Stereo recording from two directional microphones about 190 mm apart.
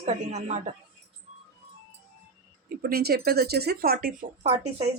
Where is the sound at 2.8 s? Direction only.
55° right (ahead or behind).